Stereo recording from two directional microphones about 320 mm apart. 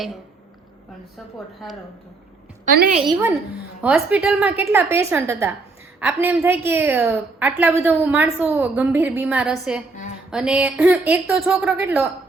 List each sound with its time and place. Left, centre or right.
2.7 s a woman's voice: right
3.1 s a woman's voice: centre